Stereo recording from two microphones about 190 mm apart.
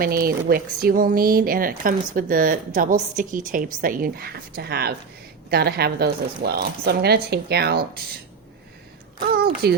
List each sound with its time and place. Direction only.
0.0 s speech: 50° right (ahead or behind)
9.3 s speech: 55° right (ahead or behind)